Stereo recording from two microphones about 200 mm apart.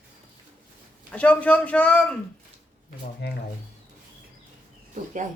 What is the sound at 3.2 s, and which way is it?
Speech, 55° left (ahead or behind).